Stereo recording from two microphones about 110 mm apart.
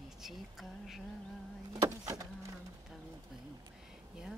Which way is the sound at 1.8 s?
30° right (ahead or behind).